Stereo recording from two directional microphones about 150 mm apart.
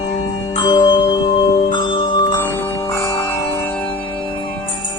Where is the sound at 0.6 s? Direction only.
25° left (ahead or behind).